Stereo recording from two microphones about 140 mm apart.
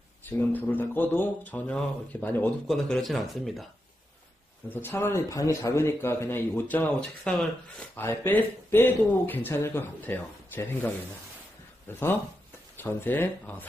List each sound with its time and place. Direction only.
0.2 s speech: 15° left (ahead or behind)
2.7 s speech: centre (ahead or behind)
4.6 s speech: 15° left (ahead or behind)
11.9 s speech: 15° left (ahead or behind)